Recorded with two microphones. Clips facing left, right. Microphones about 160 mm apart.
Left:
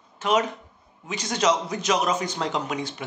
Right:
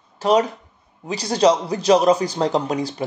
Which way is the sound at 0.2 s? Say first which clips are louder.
Right 6 dB; 35° right (ahead or behind).